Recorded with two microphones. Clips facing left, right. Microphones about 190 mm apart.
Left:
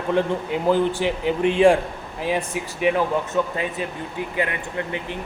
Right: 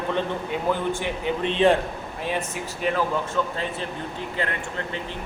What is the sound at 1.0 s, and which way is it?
Speech, 85° left.